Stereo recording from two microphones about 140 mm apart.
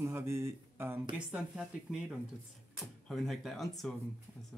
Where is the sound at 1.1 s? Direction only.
5° right (ahead or behind).